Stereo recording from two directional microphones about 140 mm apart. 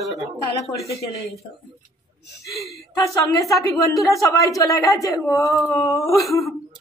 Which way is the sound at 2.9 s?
25° left (ahead or behind).